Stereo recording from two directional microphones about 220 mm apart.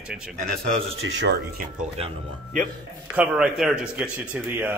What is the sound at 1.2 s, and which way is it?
Speech, 50° right (ahead or behind).